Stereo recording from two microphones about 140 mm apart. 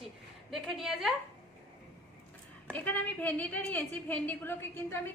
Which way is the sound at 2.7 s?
10° left (ahead or behind).